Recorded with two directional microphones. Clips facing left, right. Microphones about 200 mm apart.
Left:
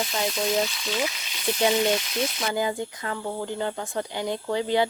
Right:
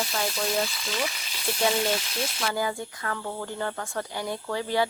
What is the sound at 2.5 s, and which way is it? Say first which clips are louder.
Speech: left 3 dB; 20° left (ahead or behind).